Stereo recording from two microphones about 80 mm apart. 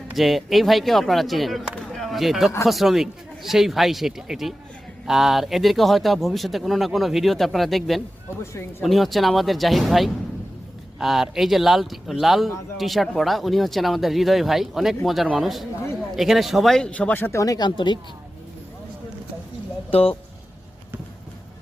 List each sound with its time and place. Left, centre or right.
0.2 s speech: centre
1.9 s a sound: centre
2.6 s speech: centre
16.9 s speech: centre
17.3 s speech: left
17.6 s speech: left